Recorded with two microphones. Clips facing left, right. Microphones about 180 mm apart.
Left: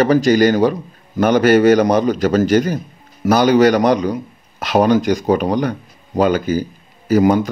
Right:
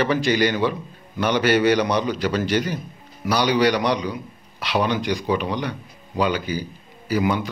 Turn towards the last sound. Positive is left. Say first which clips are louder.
# left 9 dB
turn(degrees=45)  # may be behind; listen again after turning